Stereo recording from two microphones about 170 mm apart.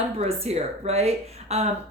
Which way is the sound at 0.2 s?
35° right (ahead or behind).